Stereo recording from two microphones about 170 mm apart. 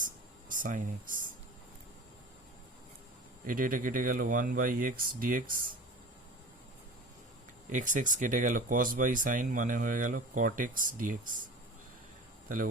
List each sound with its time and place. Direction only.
0.0 s a sound: 50° right (ahead or behind)
3.4 s speech: 55° right (ahead or behind)
7.7 s speech: 50° right (ahead or behind)